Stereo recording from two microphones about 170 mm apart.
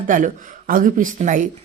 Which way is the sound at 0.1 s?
50° right (ahead or behind).